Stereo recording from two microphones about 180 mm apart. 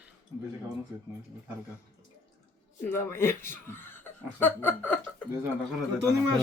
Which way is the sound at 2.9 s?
15° left (ahead or behind).